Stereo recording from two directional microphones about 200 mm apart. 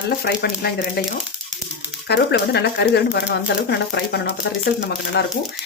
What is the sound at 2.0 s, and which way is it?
Speech, 55° left (ahead or behind).